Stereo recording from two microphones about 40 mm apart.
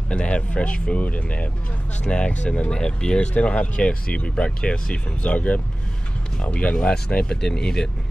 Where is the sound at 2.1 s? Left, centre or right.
Left.